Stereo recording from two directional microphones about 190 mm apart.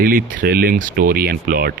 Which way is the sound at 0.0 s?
45° right (ahead or behind).